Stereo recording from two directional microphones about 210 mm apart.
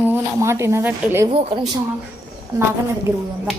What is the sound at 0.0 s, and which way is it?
Speech, 10° right (ahead or behind).